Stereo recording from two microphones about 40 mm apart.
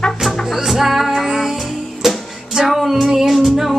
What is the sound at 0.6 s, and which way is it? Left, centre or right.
Music, centre.